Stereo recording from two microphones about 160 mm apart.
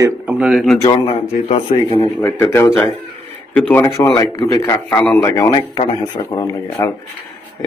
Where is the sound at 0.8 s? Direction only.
40° left (ahead or behind).